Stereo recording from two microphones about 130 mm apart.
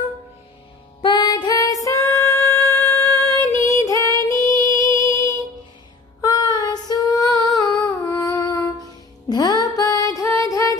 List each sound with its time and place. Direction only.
1.0 s music: 35° left (ahead or behind); by 3.3 s 15° left (ahead or behind)
3.4 s female singing: 25° left (ahead or behind)
6.2 s child singing: 30° left (ahead or behind)
7.3 s humming: 25° left (ahead or behind)
9.3 s music: 30° left (ahead or behind)